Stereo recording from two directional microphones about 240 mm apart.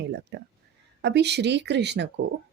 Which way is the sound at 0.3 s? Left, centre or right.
Right.